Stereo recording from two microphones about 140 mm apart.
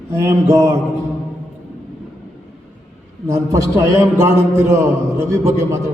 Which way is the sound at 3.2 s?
20° right (ahead or behind).